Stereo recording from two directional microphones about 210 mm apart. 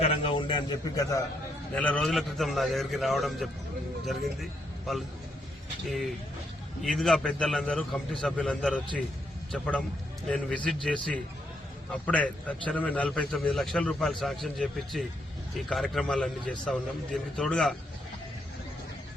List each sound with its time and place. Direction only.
0.0 s a man's voice: 30° left (ahead or behind)
1.7 s a man's voice: 5° left (ahead or behind)